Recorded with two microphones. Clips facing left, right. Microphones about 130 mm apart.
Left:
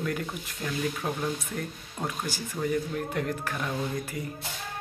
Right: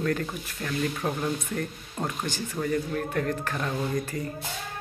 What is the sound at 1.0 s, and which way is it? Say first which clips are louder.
Speech: right 2 dB; centre (ahead or behind).